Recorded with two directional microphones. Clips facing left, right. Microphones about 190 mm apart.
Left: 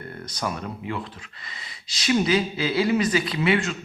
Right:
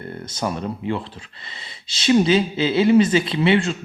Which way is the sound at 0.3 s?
25° right (ahead or behind).